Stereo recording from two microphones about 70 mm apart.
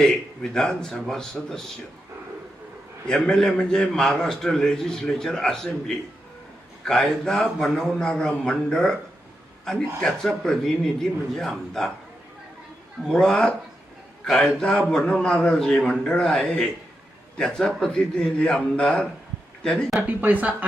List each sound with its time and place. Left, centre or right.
0.5 s a man's voice: centre
3.1 s a man's voice: centre
6.8 s a man's voice: centre
13.1 s a man's voice: centre
20.0 s speech: right